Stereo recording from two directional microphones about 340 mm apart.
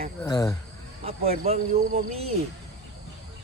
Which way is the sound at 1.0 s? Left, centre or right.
Right.